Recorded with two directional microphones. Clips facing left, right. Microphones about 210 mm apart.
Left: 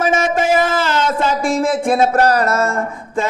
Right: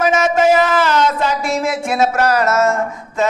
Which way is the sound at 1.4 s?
50° left (ahead or behind).